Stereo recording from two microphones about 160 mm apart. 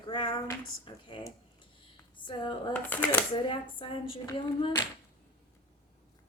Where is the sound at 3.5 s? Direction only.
35° left (ahead or behind).